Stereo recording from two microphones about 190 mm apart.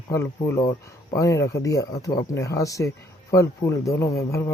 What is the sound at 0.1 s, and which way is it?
Speech, 15° left (ahead or behind).